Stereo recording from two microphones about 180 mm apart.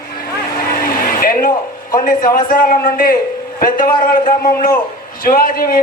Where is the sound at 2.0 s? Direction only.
50° left (ahead or behind).